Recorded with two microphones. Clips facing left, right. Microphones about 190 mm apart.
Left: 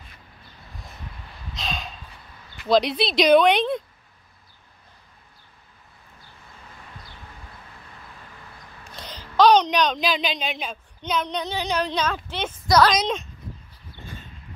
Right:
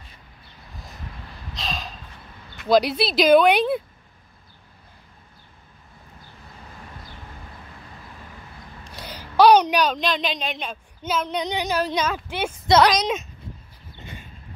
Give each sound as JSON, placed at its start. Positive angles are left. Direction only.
{"t": 0.7, "sound": "vehicle", "side_deg": 0}
{"t": 1.5, "sound": "a sound", "side_deg": 0}
{"t": 2.6, "sound": "a woman's voice", "side_deg": -5}
{"t": 9.0, "sound": "a sound", "side_deg": -10}
{"t": 9.9, "sound": "a woman's voice", "side_deg": 0}
{"t": 11.3, "sound": "speech", "side_deg": -15}
{"t": 12.6, "sound": "a woman's voice", "side_deg": -25}
{"t": 13.0, "sound": "speech", "side_deg": -5}